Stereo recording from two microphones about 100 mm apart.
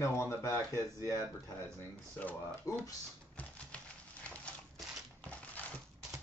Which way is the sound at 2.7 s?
35° left (ahead or behind).